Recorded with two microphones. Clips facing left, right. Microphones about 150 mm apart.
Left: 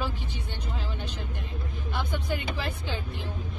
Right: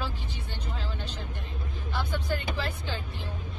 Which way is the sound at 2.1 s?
15° left (ahead or behind).